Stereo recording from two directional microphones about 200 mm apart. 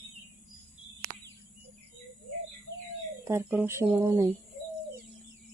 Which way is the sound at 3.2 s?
10° right (ahead or behind).